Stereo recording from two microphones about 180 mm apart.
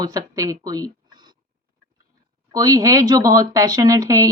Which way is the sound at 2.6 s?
20° right (ahead or behind).